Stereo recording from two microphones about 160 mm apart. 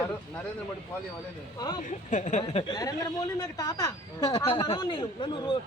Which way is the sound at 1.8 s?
50° left (ahead or behind).